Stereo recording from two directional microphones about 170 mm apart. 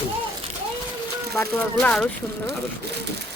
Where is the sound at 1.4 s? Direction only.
10° left (ahead or behind).